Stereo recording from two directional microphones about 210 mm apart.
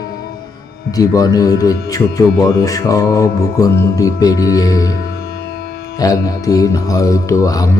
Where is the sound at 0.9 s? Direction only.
15° left (ahead or behind).